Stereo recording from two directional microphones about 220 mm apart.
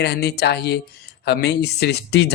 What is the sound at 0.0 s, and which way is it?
A man's voice, 50° left (ahead or behind).